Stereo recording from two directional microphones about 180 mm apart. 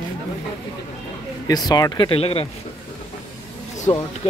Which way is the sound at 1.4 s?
20° left (ahead or behind).